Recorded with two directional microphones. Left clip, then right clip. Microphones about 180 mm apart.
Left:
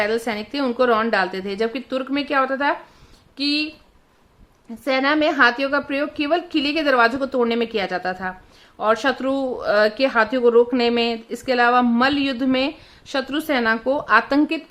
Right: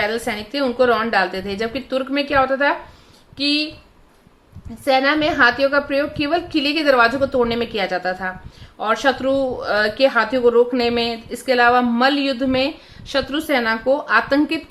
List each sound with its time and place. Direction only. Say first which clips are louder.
0.0 s a woman's voice: even; 45° left (ahead or behind)
4.9 s a woman's voice: right 2 dB; 45° left (ahead or behind)